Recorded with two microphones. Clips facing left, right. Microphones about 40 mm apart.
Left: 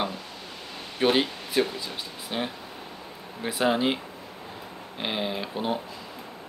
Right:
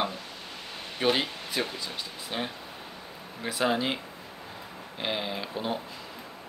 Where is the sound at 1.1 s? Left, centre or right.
Centre.